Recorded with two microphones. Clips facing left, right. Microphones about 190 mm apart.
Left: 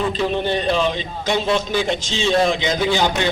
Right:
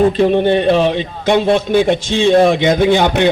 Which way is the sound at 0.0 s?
55° right (ahead or behind).